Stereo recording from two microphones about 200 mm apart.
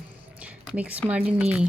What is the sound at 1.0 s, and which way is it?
Speech, 5° right (ahead or behind).